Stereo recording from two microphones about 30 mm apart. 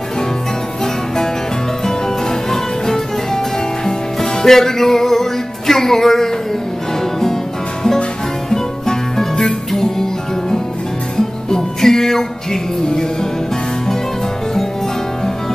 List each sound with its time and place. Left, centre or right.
1.9 s music: centre
8.5 s music: centre
11.5 s music: centre